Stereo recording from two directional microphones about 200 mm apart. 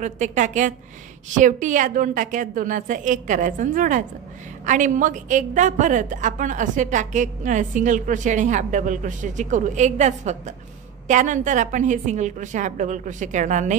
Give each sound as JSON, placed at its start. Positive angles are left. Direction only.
{"t": 0.0, "sound": "a woman's voice", "side_deg": -35}